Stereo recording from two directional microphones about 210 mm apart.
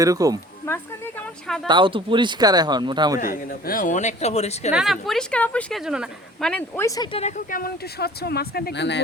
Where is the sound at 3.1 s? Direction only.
40° left (ahead or behind).